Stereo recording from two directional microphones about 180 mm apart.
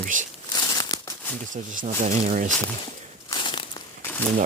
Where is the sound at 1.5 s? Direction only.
45° right (ahead or behind).